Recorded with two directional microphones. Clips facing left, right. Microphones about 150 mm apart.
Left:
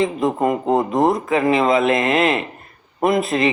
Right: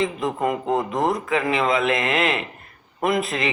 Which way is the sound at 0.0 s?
35° left (ahead or behind).